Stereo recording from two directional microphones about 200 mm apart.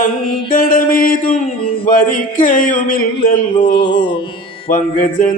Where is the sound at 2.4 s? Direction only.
40° left (ahead or behind).